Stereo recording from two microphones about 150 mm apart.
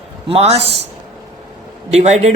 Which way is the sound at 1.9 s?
45° right (ahead or behind).